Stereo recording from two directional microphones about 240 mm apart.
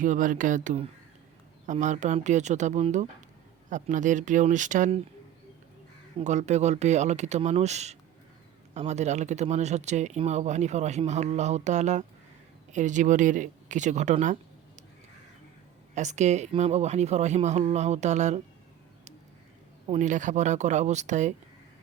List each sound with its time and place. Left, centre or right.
0.0 s speech: right
6.1 s speech: right
16.0 s speech: right
19.9 s speech: right